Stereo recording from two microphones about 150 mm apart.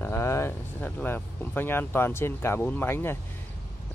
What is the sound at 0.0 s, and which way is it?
Speech, 20° left (ahead or behind).